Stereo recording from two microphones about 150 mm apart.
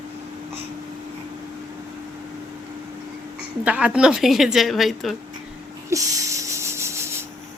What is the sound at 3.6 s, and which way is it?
A woman's voice, 10° right (ahead or behind).